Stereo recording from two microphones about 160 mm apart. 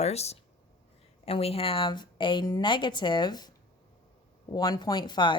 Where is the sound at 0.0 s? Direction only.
40° left (ahead or behind); by 3.5 s 25° left (ahead or behind).